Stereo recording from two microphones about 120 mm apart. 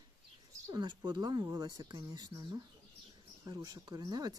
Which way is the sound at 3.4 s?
30° right (ahead or behind).